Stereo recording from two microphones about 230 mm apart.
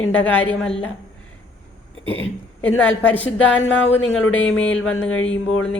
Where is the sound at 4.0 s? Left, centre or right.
Left.